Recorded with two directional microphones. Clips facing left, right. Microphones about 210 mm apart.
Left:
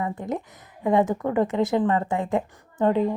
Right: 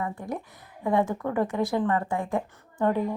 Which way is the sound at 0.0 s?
20° left (ahead or behind).